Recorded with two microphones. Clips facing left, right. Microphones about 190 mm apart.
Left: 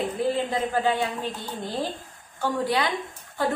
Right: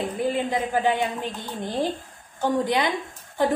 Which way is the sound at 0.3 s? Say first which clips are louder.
Right 1 dB; 15° right (ahead or behind).